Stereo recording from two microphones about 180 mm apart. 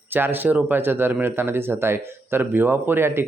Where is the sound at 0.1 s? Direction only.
10° right (ahead or behind).